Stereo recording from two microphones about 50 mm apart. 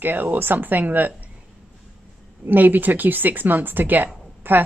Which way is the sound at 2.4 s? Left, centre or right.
Right.